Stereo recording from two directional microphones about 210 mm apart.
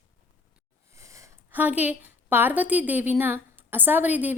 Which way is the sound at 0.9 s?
15° right (ahead or behind).